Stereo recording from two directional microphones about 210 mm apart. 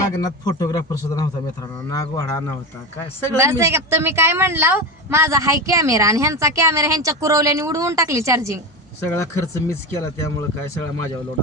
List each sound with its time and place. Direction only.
0.2 s a man's voice: 15° left (ahead or behind)
3.3 s speech: 15° right (ahead or behind)
9.1 s a man's voice: 15° left (ahead or behind)